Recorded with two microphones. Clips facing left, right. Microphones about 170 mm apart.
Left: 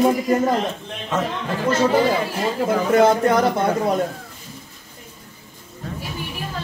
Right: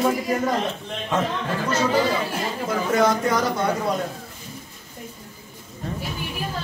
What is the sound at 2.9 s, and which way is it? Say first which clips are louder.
Speech: left 5 dB; 55° left (ahead or behind).